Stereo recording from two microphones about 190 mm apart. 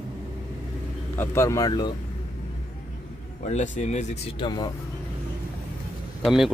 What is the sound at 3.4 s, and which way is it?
Speech, 40° left (ahead or behind).